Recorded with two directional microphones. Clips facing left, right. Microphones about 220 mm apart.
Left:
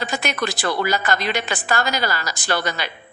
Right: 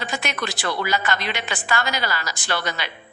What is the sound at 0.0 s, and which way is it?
A woman's voice, 40° left (ahead or behind).